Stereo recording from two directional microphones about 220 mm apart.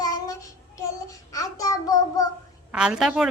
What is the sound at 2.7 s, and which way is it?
Speech, 5° right (ahead or behind).